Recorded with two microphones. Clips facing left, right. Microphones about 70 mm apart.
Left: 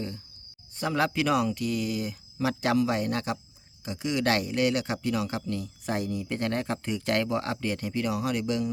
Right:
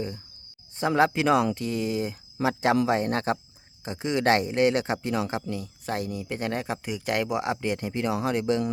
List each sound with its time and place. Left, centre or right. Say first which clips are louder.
0.8 s speech: right 4 dB; right
5.5 s speech: even; centre; by 8.6 s right